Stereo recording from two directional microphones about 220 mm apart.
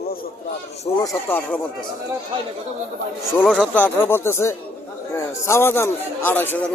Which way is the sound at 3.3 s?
5° left (ahead or behind).